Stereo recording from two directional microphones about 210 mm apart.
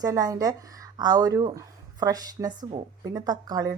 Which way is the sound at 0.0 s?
15° right (ahead or behind).